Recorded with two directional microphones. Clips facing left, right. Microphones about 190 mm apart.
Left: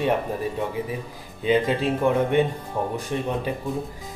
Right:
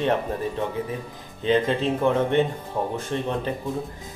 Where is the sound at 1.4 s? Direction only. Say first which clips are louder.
Even; 10° left (ahead or behind).